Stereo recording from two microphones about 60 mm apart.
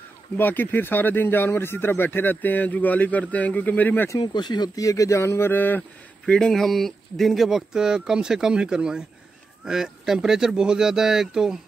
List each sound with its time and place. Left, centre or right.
0.4 s speech: left
4.7 s speech: left
5.5 s speech: left
6.2 s speech: centre